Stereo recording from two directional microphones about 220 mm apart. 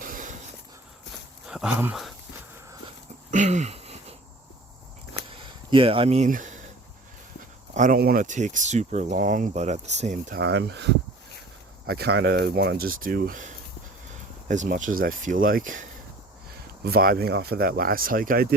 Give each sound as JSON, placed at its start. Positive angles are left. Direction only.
{"t": 0.0, "sound": "a sound", "side_deg": -35}
{"t": 1.5, "sound": "speech", "side_deg": -5}
{"t": 3.3, "sound": "a sound", "side_deg": -30}
{"t": 5.3, "sound": "speech", "side_deg": -25}
{"t": 7.7, "sound": "speech", "side_deg": -35}
{"t": 10.4, "sound": "speech", "side_deg": -50}